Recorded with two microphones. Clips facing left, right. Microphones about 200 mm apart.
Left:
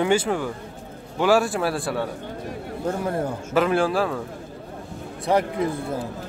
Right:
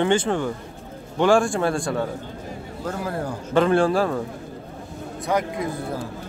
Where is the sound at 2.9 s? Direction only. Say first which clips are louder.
Left 3 dB; 25° left (ahead or behind).